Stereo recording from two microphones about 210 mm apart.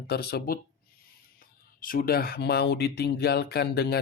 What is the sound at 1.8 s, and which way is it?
Speech, 40° left (ahead or behind).